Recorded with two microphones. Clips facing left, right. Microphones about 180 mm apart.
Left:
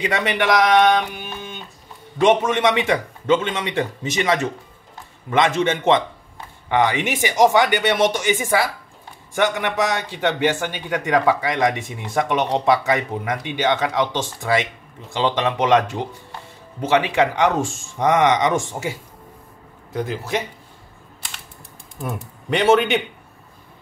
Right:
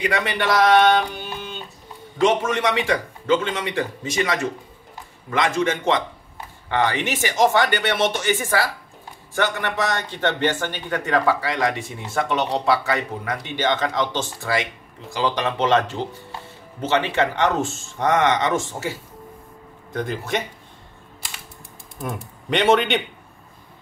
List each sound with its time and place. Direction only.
0.0 s speech: 20° left (ahead or behind)
19.9 s speech: 5° left (ahead or behind)
22.0 s speech: centre (ahead or behind)